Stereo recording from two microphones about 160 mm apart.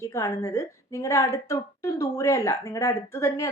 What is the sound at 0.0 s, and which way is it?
A woman's voice, 15° left (ahead or behind).